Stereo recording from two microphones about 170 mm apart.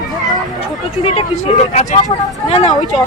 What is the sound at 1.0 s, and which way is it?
Speech, 35° left (ahead or behind).